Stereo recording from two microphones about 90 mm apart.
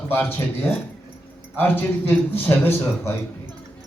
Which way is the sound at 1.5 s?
20° left (ahead or behind).